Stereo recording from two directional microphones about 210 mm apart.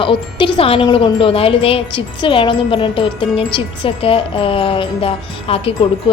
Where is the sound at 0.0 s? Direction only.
25° left (ahead or behind).